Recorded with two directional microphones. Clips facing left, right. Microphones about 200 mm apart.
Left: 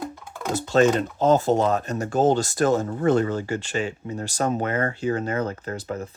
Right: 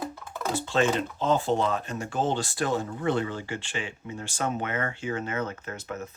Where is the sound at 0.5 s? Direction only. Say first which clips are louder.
Left 6 dB; 40° left (ahead or behind).